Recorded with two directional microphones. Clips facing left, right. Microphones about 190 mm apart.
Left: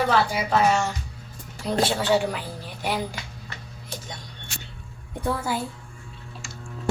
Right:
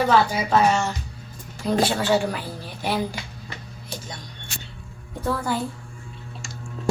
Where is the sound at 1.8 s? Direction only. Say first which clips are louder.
Even; 20° left (ahead or behind).